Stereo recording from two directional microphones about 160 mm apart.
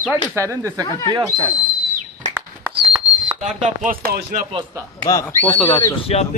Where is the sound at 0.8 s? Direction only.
20° left (ahead or behind).